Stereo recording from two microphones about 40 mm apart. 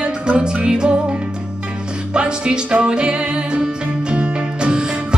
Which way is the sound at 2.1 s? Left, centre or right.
Right.